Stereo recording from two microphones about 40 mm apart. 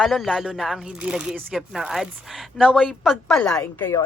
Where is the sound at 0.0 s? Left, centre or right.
Centre.